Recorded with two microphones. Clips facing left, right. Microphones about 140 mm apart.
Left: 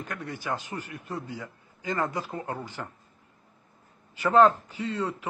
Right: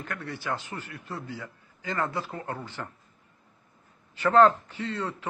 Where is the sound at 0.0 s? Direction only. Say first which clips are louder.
Even; 15° left (ahead or behind).